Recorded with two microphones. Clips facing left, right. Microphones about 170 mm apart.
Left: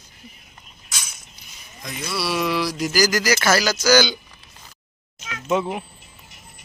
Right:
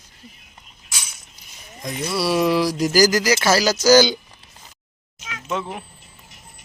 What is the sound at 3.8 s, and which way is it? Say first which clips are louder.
Speech: right 5 dB; 40° right (ahead or behind).